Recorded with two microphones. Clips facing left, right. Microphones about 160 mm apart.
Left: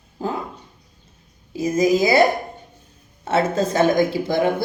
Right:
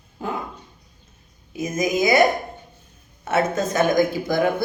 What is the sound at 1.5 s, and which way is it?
Speech, 30° left (ahead or behind).